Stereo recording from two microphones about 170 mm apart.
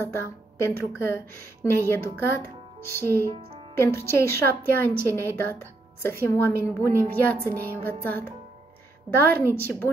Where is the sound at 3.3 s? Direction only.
35° right (ahead or behind).